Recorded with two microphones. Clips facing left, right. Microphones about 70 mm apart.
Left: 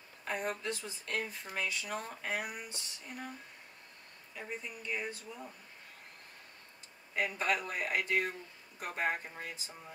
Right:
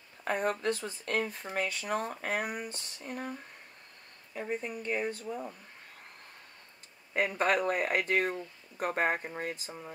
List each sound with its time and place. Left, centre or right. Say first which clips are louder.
0.2 s speech: right 6 dB; right
7.2 s speech: right 5 dB; right